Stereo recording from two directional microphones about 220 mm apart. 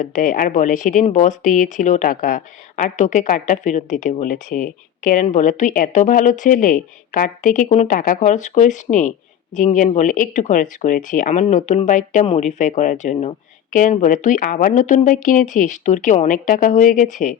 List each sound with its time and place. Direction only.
0.0 s speech: 40° left (ahead or behind)